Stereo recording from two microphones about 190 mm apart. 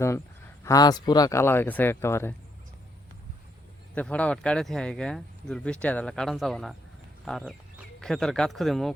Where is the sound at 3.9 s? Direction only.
5° left (ahead or behind).